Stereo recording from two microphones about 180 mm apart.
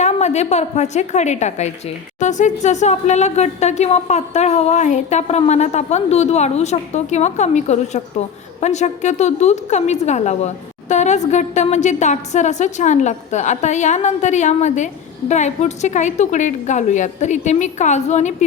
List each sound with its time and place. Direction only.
0.0 s a woman's voice: 40° left (ahead or behind)